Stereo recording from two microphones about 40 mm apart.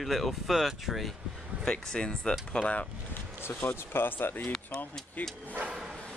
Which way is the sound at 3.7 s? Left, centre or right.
Left.